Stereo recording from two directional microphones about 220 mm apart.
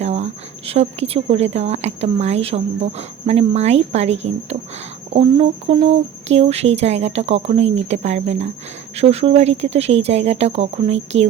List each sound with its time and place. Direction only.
0.0 s speech: 30° right (ahead or behind)